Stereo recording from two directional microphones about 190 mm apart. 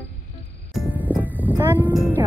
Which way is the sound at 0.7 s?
10° right (ahead or behind).